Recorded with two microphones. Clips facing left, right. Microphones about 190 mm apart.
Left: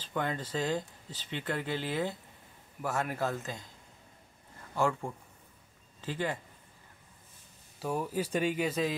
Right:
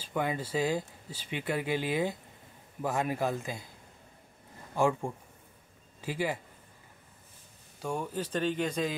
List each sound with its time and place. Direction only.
0.0 s speech: 10° right (ahead or behind)
4.7 s speech: 15° right (ahead or behind)
7.8 s speech: 5° left (ahead or behind)